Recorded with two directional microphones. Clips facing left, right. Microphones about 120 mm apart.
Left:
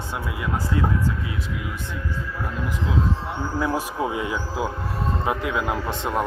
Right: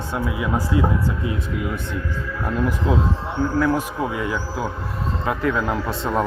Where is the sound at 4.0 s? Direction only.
20° left (ahead or behind).